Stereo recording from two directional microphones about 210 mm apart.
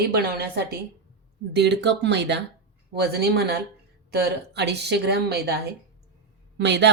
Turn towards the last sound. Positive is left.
turn(degrees=-55)  # may be behind; listen again after turning